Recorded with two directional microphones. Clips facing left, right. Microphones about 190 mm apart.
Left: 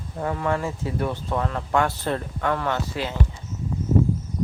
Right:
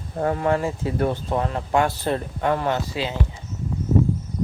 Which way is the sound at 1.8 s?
15° right (ahead or behind).